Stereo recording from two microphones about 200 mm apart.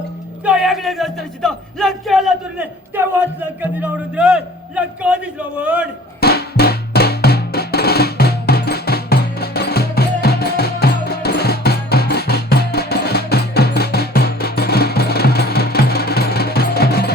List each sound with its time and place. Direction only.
0.4 s speech: 5° right (ahead or behind)
6.1 s music: 50° left (ahead or behind)